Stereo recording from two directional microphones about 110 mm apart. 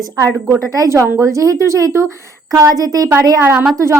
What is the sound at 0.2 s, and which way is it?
A woman's voice, 30° right (ahead or behind).